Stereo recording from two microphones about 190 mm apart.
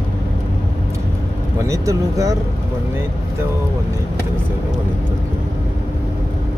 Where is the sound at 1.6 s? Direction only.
15° right (ahead or behind).